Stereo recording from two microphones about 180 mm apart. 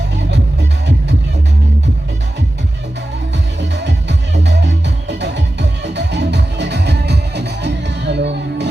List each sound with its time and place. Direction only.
3.6 s music: 75° right (ahead or behind)